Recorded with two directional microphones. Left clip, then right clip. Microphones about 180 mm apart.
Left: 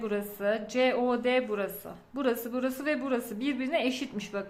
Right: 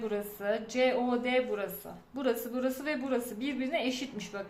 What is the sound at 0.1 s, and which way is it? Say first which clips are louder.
A woman's voice: left 5 dB; 25° left (ahead or behind).